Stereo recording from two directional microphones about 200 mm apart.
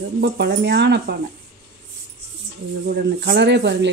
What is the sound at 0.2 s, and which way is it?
Speech, 55° right (ahead or behind).